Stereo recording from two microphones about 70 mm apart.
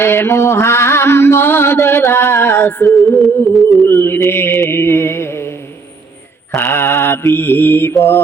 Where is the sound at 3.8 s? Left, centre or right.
Left.